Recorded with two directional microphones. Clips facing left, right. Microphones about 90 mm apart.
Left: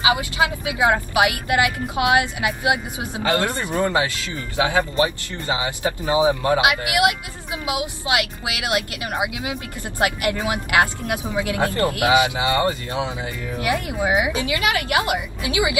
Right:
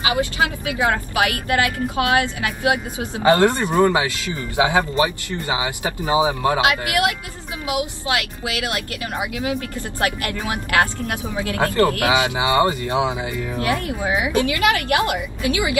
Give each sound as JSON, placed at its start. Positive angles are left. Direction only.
{"t": 0.0, "sound": "a woman's voice", "side_deg": 20}
{"t": 3.2, "sound": "speech", "side_deg": -25}
{"t": 6.6, "sound": "a woman's voice", "side_deg": 20}
{"t": 12.1, "sound": "speech", "side_deg": -20}
{"t": 13.6, "sound": "a woman's voice", "side_deg": 20}